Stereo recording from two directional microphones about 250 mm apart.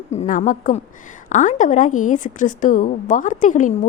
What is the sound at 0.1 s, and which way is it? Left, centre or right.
A woman's voice, left.